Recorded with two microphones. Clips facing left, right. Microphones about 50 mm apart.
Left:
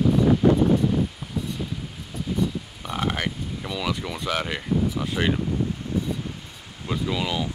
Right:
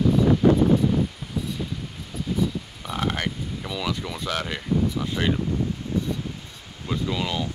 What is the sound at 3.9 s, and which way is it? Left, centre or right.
Speech, centre.